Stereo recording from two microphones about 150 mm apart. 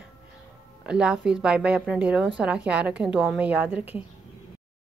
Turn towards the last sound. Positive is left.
turn(degrees=-10)  # may be behind; listen again after turning